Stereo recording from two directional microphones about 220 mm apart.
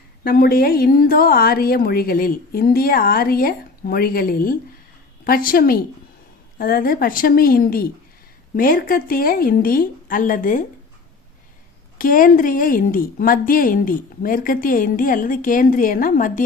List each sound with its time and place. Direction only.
0.3 s a woman's voice: 45° left (ahead or behind)
11.9 s speech: 40° left (ahead or behind)